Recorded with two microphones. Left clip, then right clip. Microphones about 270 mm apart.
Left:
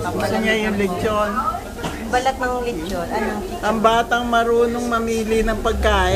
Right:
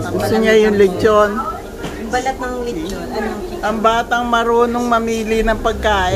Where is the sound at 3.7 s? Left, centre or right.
Centre.